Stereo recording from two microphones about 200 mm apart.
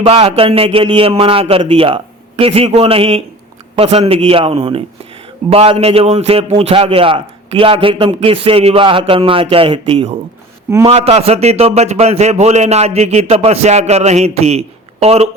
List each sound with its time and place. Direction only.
0.0 s a man's voice: 30° right (ahead or behind)